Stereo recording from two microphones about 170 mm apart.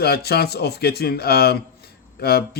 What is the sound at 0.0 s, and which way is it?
Speech, 70° left (ahead or behind).